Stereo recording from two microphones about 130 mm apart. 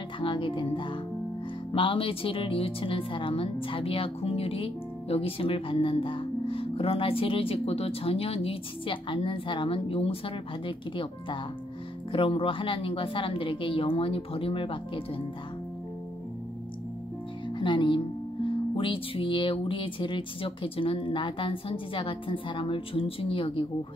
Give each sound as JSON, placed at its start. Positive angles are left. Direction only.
{"t": 0.2, "sound": "speech", "side_deg": 40}
{"t": 12.1, "sound": "speech", "side_deg": 45}
{"t": 17.5, "sound": "speech", "side_deg": 35}